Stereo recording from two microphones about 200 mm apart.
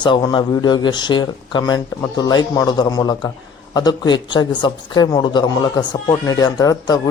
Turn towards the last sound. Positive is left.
turn(degrees=20)  # may be behind; listen again after turning